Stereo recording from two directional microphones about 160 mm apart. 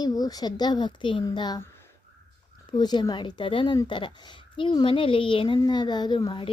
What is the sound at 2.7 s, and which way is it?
A woman's voice, 25° left (ahead or behind).